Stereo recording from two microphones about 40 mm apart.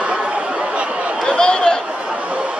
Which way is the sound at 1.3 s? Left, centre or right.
Left.